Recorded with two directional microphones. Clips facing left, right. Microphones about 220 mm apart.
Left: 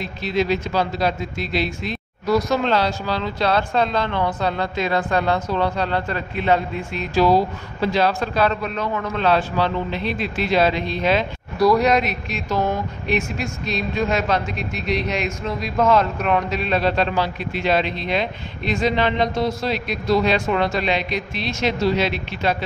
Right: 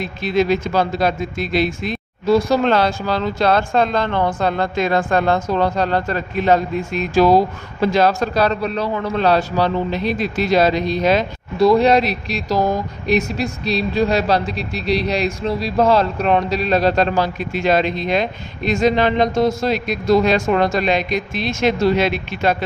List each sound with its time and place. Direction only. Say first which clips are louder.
0.0 s speech: right 4 dB; 50° right (ahead or behind)
2.2 s speech: right 4 dB; 30° right (ahead or behind)
2.6 s a man's voice: right 4 dB; 50° right (ahead or behind)
11.5 s speech: right 4 dB; 25° right (ahead or behind); by 22.6 s 50° right (ahead or behind)